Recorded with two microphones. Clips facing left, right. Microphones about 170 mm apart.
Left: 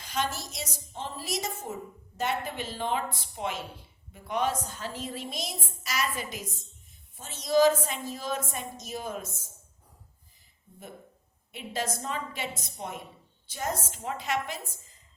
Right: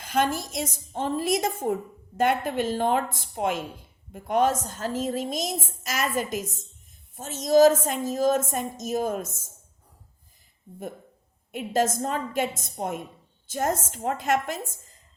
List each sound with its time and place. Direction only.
0.0 s a woman's voice: 50° right (ahead or behind)
11.5 s a woman's voice: 45° right (ahead or behind)